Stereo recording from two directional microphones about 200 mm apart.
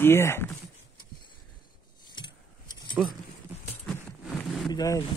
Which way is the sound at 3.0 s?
Centre (ahead or behind).